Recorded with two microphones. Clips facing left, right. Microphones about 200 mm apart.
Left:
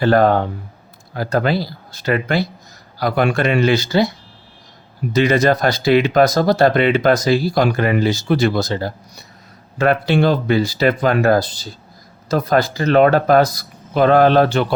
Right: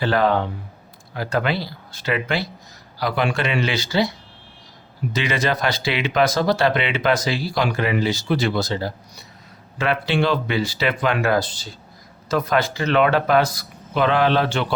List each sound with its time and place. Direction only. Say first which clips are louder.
0.0 s speech: left 5 dB; 45° left (ahead or behind)
5.1 s speech: left 8 dB; 40° left (ahead or behind)